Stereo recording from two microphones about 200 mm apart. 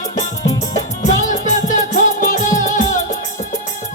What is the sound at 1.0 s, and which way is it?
Music, 35° left (ahead or behind).